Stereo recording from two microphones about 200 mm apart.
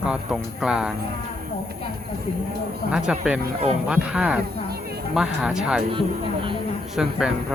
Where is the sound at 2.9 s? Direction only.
5° right (ahead or behind).